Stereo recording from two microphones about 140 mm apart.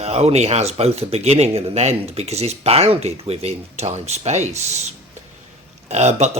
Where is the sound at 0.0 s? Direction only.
50° right (ahead or behind).